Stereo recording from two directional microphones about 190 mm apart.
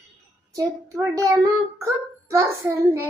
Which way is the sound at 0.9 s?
15° right (ahead or behind).